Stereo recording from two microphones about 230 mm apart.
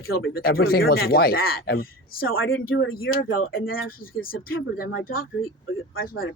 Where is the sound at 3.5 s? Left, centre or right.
Left.